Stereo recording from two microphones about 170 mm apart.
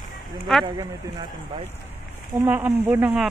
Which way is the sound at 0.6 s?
25° right (ahead or behind).